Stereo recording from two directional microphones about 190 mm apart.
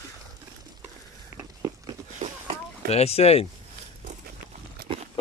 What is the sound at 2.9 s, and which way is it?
Speech, 35° left (ahead or behind).